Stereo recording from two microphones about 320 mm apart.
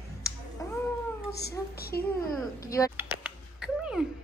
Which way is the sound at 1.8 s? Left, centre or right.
Left.